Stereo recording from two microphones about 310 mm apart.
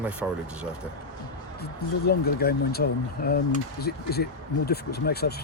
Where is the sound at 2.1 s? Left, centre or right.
Left.